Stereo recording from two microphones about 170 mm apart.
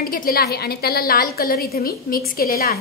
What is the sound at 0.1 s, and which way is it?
A woman's voice, 60° left (ahead or behind).